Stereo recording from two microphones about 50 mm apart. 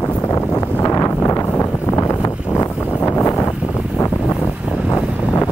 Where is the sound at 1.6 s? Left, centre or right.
Left.